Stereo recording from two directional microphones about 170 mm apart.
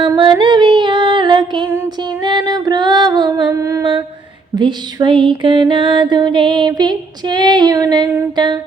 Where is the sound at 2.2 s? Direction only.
25° right (ahead or behind).